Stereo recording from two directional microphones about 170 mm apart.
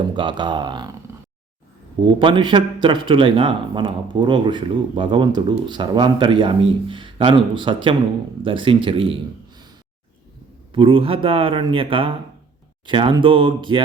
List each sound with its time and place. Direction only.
0.1 s speech: 30° right (ahead or behind)
2.1 s speech: 30° right (ahead or behind)
10.7 s speech: 30° right (ahead or behind)